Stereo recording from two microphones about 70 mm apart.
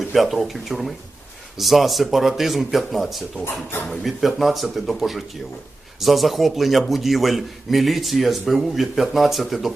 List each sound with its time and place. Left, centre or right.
0.0 s a man's voice: centre
3.4 s speech: left
4.0 s a man's voice: centre